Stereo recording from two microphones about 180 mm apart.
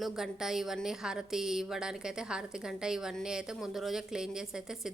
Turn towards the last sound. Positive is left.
turn(degrees=-5)  # may be behind; listen again after turning